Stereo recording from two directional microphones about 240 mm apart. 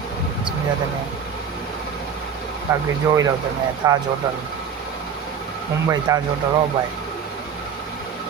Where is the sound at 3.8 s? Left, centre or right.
Centre.